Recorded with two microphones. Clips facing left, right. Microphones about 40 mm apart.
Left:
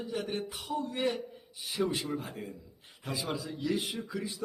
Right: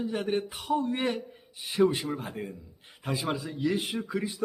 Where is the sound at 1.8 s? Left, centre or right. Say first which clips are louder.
Right 7 dB; centre.